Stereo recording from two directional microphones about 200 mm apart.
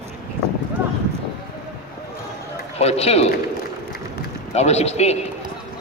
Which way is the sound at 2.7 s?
30° left (ahead or behind).